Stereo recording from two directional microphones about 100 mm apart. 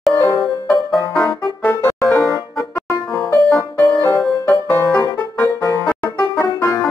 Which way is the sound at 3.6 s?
35° left (ahead or behind).